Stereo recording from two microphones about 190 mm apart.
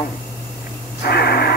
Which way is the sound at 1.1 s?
55° left (ahead or behind).